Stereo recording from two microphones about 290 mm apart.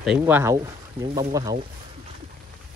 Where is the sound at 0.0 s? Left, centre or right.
Centre.